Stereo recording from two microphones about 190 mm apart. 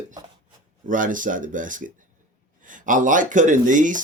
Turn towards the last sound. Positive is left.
turn(degrees=-45)  # may be behind; listen again after turning